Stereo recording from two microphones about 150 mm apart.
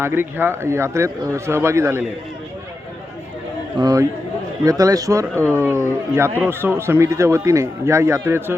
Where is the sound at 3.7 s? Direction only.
25° right (ahead or behind).